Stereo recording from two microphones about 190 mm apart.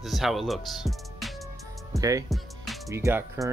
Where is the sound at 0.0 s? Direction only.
Centre (ahead or behind).